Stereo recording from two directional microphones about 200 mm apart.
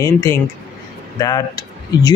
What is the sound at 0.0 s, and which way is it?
Speech, 15° left (ahead or behind).